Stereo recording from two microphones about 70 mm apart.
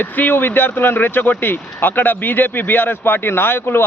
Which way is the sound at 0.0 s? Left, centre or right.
Left.